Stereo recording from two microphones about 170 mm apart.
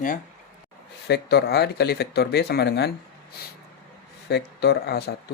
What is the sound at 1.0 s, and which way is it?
Speech, 75° left (ahead or behind).